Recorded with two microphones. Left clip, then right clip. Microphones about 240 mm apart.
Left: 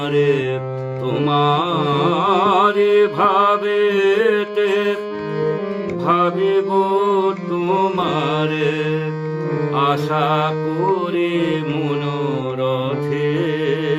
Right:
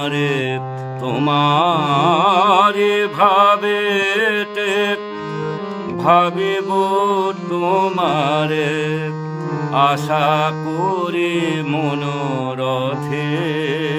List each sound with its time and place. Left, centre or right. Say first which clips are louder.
0.1 s music: left 8 dB; right
1.2 s mantra: right 2 dB; right
6.1 s mantra: right 3 dB; right
9.7 s mantra: right 4 dB; right
10.9 s music: even; right